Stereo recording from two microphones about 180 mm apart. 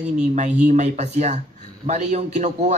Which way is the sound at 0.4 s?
40° right (ahead or behind).